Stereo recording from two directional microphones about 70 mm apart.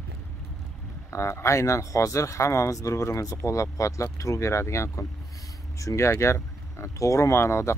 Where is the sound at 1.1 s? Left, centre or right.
Left.